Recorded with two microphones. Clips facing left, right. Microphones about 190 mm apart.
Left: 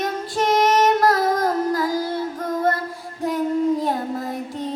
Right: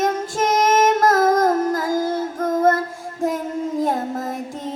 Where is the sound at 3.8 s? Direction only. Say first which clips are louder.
Right 2 dB; 45° right (ahead or behind).